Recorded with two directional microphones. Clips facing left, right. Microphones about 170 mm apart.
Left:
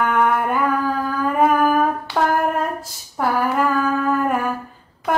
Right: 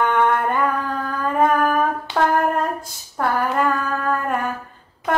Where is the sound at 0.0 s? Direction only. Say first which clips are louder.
Even; 5° left (ahead or behind).